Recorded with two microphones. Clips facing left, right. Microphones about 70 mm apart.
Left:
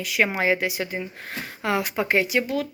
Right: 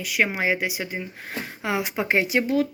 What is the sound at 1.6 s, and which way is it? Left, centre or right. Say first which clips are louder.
Speech: left 2 dB; centre.